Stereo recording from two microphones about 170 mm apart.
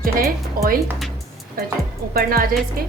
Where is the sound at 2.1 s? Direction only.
60° right (ahead or behind).